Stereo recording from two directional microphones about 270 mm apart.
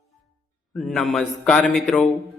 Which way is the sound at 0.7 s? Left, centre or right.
Centre.